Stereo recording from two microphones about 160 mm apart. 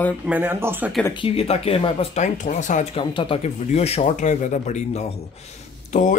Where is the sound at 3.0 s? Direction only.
35° left (ahead or behind).